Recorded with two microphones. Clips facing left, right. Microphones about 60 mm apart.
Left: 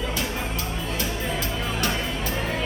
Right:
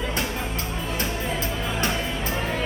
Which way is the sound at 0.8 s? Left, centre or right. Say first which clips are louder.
Right 2 dB; right.